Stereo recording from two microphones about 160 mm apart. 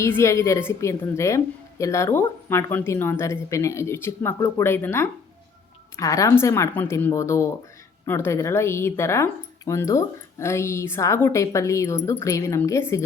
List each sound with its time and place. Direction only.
0.0 s a woman's voice: 15° left (ahead or behind)